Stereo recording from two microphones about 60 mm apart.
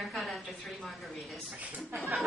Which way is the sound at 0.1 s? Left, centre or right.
Centre.